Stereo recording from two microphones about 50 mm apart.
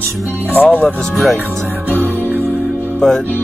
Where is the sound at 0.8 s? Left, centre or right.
Centre.